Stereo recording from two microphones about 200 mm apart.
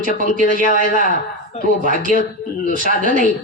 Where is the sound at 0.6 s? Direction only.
40° left (ahead or behind).